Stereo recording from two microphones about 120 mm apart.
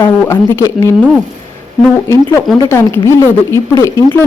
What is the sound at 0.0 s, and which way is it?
Speech, 20° left (ahead or behind).